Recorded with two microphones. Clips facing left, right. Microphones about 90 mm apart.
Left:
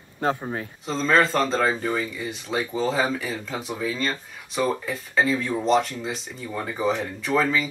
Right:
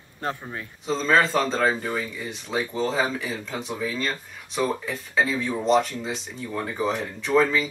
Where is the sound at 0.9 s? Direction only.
Centre (ahead or behind).